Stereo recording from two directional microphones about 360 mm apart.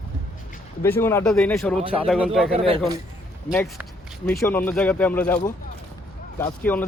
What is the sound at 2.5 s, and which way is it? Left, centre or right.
Speech, centre.